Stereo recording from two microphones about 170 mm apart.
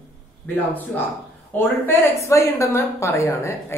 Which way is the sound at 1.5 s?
10° left (ahead or behind).